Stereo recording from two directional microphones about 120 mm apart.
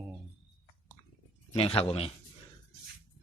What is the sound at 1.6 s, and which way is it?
Speech, 50° left (ahead or behind).